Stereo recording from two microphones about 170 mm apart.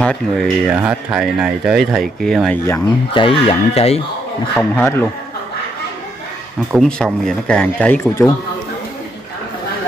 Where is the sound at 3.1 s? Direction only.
35° left (ahead or behind).